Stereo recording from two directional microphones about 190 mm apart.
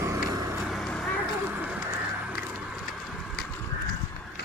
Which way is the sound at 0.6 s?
Centre (ahead or behind).